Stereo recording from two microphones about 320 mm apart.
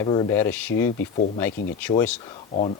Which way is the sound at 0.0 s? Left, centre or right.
Centre.